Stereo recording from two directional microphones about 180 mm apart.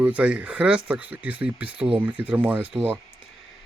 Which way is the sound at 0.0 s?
5° right (ahead or behind).